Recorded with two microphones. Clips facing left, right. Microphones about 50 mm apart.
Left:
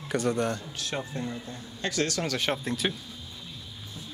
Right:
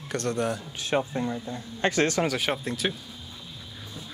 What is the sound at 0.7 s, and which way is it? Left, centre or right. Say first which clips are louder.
Speech: right 6 dB; right.